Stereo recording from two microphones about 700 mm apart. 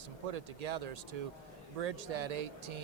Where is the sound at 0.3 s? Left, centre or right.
Right.